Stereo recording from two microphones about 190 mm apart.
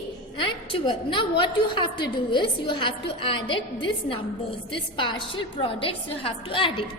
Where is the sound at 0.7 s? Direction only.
25° left (ahead or behind).